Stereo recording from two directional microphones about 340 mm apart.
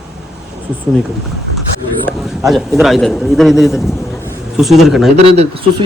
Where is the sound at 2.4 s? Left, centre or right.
Centre.